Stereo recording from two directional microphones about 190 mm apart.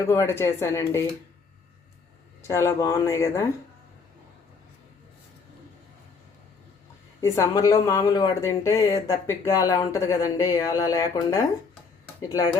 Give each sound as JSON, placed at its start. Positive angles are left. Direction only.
{"t": 0.1, "sound": "speech", "side_deg": 15}
{"t": 2.4, "sound": "speech", "side_deg": 15}
{"t": 7.2, "sound": "speech", "side_deg": 15}